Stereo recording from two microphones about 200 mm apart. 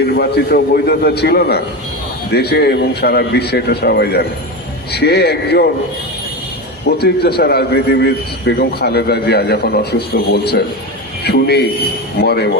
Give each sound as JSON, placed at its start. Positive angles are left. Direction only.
{"t": 0.2, "sound": "a man's voice", "side_deg": 50}
{"t": 6.8, "sound": "a man's voice", "side_deg": 55}